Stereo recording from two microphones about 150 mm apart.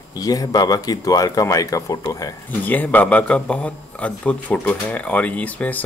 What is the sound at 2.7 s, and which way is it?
Speech, 10° left (ahead or behind).